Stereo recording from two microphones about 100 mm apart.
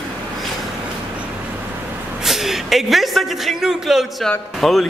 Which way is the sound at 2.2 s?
5° right (ahead or behind).